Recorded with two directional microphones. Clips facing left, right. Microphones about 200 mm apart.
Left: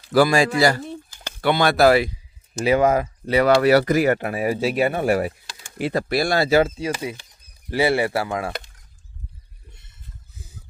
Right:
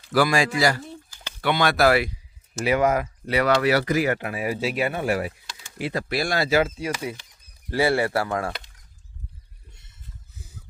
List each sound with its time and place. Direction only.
0.1 s speech: 30° left (ahead or behind)
3.6 s speech: 45° left (ahead or behind)
6.8 s speech: 20° left (ahead or behind)